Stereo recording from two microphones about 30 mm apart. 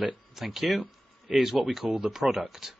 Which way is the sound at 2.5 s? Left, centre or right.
Centre.